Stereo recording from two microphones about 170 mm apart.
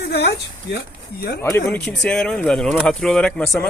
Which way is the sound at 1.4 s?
15° left (ahead or behind).